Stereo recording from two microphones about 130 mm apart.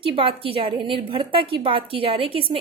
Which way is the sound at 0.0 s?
45° right (ahead or behind).